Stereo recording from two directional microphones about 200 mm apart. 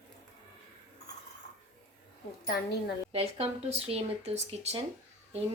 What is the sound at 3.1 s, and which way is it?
A woman's voice, 30° right (ahead or behind).